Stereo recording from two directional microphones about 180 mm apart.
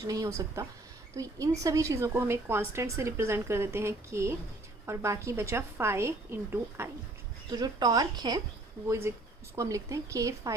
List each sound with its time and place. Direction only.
0.1 s speech: 20° right (ahead or behind)